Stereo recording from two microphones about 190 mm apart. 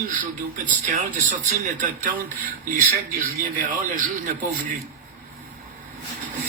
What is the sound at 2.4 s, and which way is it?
Speech, 45° right (ahead or behind).